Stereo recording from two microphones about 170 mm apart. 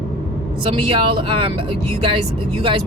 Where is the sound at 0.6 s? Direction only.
30° right (ahead or behind).